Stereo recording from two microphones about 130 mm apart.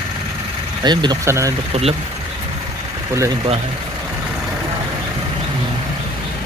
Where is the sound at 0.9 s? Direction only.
35° right (ahead or behind).